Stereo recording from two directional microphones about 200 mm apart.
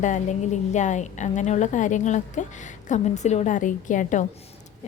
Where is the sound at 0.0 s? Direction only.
40° left (ahead or behind).